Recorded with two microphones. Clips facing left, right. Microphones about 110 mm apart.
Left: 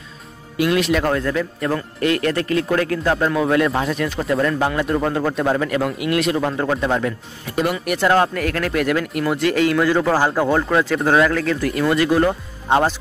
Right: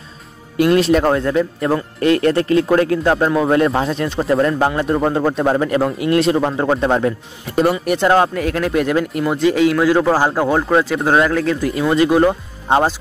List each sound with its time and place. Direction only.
0.6 s speech: 40° right (ahead or behind); by 11.5 s 10° right (ahead or behind)
11.9 s speech: 20° right (ahead or behind)